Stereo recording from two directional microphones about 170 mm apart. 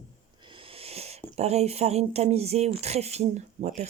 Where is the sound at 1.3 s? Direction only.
40° right (ahead or behind).